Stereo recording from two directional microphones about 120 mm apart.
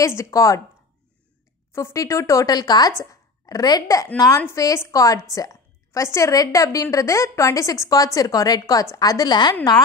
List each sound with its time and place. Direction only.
0.0 s a woman's voice: 25° left (ahead or behind)
1.7 s a woman's voice: 25° left (ahead or behind)